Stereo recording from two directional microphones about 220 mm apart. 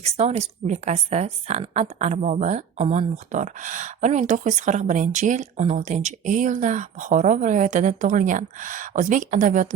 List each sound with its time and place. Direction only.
0.0 s speech: 30° right (ahead or behind)